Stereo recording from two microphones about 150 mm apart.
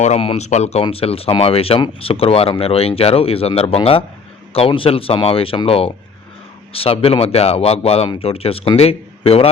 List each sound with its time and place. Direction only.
0.0 s speech: 45° left (ahead or behind)